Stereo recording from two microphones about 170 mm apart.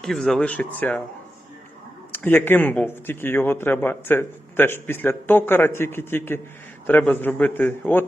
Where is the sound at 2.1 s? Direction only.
10° left (ahead or behind).